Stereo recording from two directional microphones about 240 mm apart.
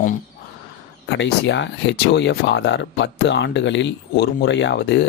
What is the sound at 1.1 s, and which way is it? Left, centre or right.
Speech, left.